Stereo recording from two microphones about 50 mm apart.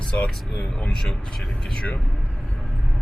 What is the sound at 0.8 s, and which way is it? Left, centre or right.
Speech, centre.